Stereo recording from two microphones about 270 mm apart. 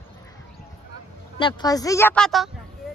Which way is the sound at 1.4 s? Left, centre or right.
Centre.